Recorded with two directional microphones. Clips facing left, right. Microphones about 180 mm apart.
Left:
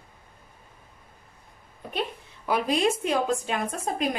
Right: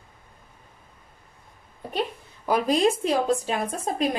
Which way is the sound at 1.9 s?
40° right (ahead or behind).